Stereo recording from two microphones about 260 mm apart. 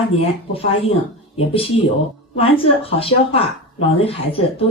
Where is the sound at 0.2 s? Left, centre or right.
Left.